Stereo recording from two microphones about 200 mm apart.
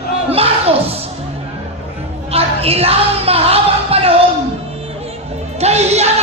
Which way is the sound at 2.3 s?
30° right (ahead or behind).